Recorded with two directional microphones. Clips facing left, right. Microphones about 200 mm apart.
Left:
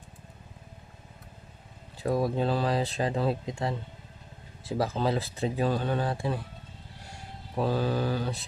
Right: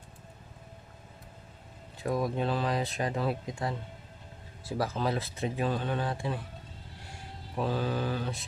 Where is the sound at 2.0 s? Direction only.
30° left (ahead or behind).